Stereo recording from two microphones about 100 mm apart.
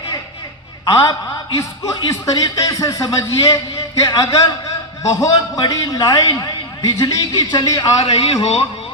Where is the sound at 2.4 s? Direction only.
35° left (ahead or behind).